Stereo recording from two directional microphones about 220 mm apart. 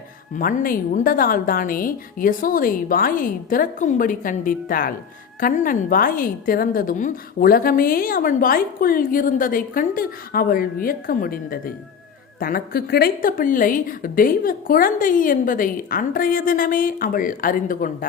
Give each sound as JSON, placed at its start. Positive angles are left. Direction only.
{"t": 0.3, "sound": "a woman's voice", "side_deg": 40}